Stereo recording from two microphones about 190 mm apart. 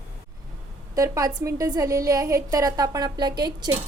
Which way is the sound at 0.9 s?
15° right (ahead or behind).